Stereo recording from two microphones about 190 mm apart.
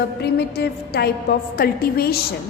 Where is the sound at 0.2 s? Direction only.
60° left (ahead or behind).